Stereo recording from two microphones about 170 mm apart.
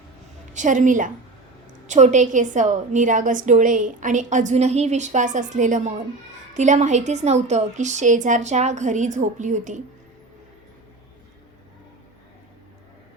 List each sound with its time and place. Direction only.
0.5 s a woman's voice: 50° right (ahead or behind)